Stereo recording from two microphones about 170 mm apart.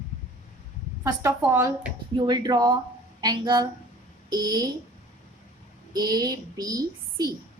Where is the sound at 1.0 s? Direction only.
15° right (ahead or behind).